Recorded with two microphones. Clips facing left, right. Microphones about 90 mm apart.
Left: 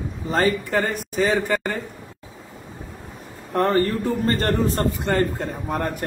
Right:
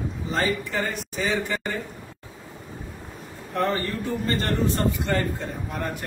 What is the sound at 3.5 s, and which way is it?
A man's voice, 50° left (ahead or behind).